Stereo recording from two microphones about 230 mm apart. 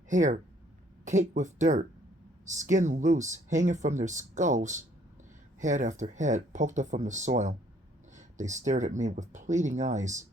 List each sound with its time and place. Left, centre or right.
0.1 s speech: right